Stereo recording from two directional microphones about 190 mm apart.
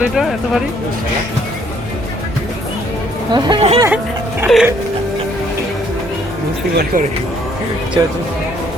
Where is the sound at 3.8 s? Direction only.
10° right (ahead or behind).